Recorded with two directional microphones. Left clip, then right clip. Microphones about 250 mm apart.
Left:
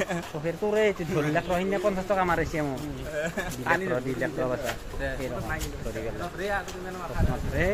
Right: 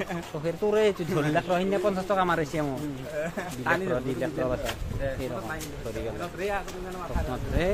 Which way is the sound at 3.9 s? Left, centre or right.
Centre.